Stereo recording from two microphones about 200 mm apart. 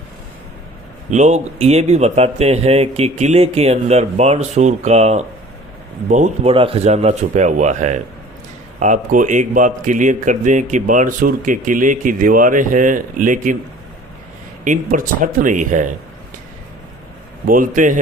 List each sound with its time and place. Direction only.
1.1 s speech: 35° right (ahead or behind)
14.6 s speech: 40° right (ahead or behind)
17.4 s speech: 45° right (ahead or behind)